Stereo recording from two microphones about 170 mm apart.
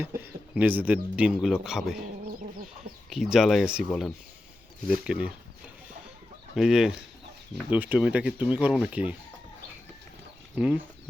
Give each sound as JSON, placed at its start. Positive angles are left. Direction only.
{"t": 0.0, "sound": "speech", "side_deg": -10}
{"t": 3.1, "sound": "speech", "side_deg": 0}
{"t": 6.6, "sound": "speech", "side_deg": -5}
{"t": 10.5, "sound": "speech", "side_deg": -10}